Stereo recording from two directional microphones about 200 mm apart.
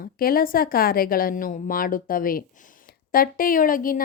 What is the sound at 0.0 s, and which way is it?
A woman's voice, 45° left (ahead or behind).